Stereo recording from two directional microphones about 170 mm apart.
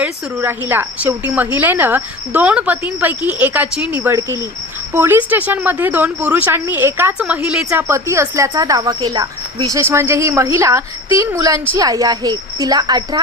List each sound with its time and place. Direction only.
0.0 s a woman's voice: 10° right (ahead or behind)